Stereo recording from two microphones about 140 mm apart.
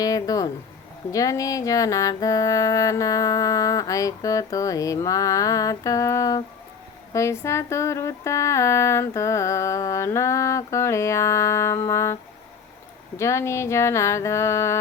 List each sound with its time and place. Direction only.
0.0 s music: 25° left (ahead or behind)
13.1 s music: 20° left (ahead or behind)